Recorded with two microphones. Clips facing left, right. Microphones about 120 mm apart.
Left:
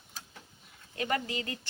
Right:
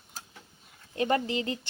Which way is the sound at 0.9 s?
25° right (ahead or behind).